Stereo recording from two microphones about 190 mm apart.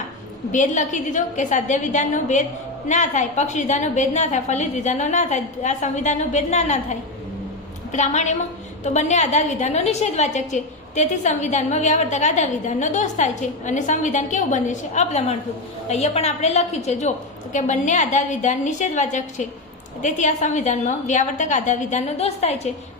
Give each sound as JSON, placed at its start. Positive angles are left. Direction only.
{"t": 0.5, "sound": "a woman's voice", "side_deg": 40}
{"t": 7.9, "sound": "a woman's voice", "side_deg": 40}